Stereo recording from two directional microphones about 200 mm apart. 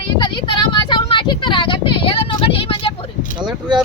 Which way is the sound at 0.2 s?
25° left (ahead or behind).